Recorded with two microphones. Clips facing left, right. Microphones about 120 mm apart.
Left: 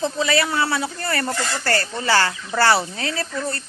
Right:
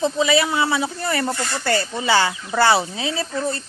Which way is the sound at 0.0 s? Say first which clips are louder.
Right 2 dB; 20° right (ahead or behind).